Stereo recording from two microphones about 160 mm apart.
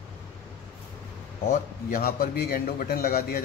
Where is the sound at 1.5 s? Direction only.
60° left (ahead or behind).